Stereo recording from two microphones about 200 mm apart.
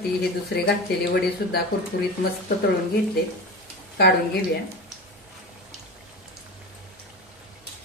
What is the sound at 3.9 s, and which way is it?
Speech, 55° left (ahead or behind).